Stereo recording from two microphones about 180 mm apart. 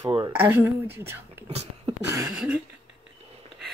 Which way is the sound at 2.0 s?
15° right (ahead or behind).